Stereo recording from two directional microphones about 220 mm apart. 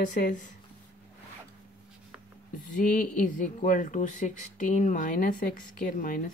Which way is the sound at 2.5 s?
35° left (ahead or behind).